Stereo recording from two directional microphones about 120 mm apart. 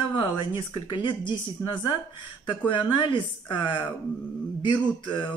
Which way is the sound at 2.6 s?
40° left (ahead or behind).